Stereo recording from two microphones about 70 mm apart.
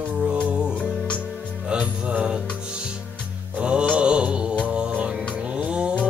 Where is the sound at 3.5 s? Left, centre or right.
Centre.